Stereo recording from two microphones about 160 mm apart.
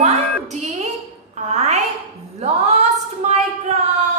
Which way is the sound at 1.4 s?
45° right (ahead or behind).